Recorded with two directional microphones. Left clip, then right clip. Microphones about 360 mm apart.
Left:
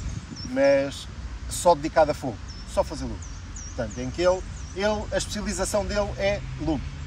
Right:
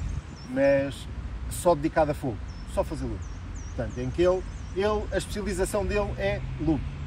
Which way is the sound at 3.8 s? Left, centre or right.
Centre.